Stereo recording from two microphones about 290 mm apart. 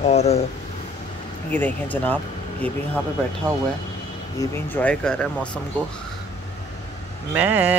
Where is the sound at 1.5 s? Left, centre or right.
Centre.